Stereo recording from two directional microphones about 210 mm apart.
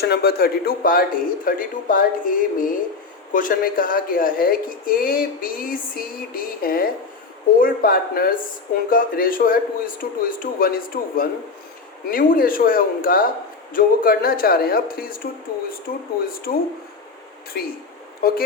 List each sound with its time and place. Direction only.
0.0 s a man's voice: 50° left (ahead or behind)